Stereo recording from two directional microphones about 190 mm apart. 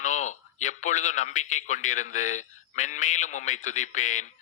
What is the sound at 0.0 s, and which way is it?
A man's voice, 40° left (ahead or behind).